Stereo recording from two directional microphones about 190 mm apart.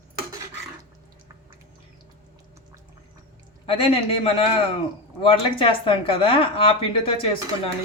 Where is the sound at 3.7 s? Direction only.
30° left (ahead or behind).